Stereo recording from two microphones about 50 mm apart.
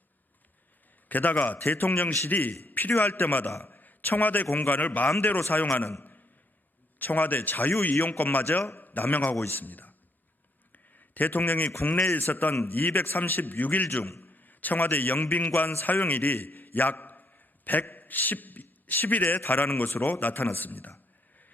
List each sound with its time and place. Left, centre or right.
1.0 s a man's voice: left
6.0 s a sound: left
7.0 s a man's voice: left
10.7 s a sound: left
12.1 s a man's voice: left
20.1 s a man's voice: left